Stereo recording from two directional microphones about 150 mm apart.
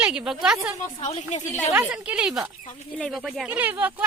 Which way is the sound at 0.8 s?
50° left (ahead or behind).